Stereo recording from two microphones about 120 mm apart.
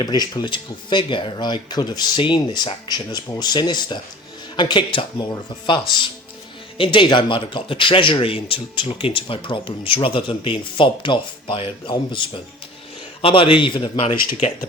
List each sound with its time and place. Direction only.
0.0 s speech: 35° left (ahead or behind)